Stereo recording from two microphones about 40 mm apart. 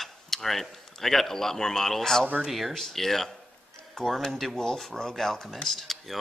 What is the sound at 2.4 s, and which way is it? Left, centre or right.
Speech, centre.